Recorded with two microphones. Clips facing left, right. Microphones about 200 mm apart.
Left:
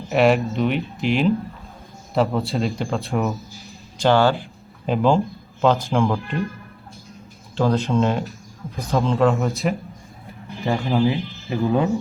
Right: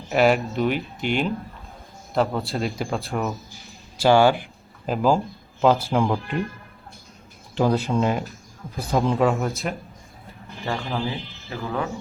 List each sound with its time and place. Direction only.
0.1 s speech: centre (ahead or behind)
3.7 s a sound: 5° right (ahead or behind)
4.9 s speech: centre (ahead or behind)
7.5 s speech: 15° right (ahead or behind)
9.4 s speech: centre (ahead or behind)
10.6 s speech: 15° left (ahead or behind)